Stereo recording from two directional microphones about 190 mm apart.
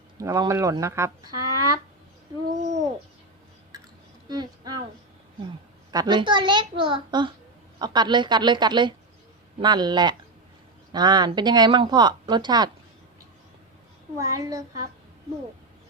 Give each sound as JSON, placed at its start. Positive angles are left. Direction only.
{"t": 0.2, "sound": "speech", "side_deg": -15}
{"t": 4.3, "sound": "speech", "side_deg": -20}
{"t": 5.9, "sound": "speech", "side_deg": -20}
{"t": 14.2, "sound": "speech", "side_deg": -15}